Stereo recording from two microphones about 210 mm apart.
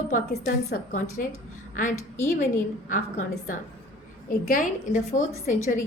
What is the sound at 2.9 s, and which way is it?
Speech, 40° left (ahead or behind).